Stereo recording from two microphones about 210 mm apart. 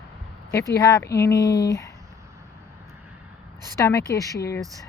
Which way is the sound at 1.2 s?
15° left (ahead or behind).